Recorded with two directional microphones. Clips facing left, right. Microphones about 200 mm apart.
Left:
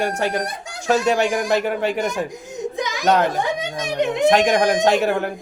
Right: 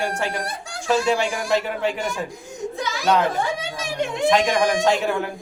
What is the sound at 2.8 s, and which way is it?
Children playing, 15° left (ahead or behind).